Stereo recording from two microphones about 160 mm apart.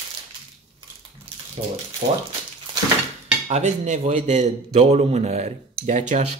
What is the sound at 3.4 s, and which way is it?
A man's voice, 45° right (ahead or behind).